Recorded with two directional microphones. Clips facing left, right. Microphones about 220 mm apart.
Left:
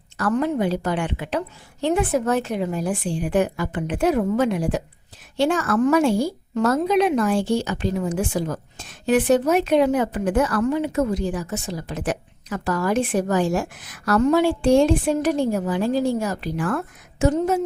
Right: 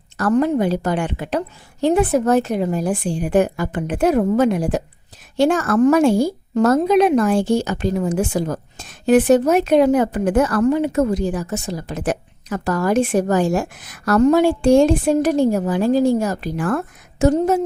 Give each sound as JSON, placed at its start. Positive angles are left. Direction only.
{"t": 0.2, "sound": "speech", "side_deg": -40}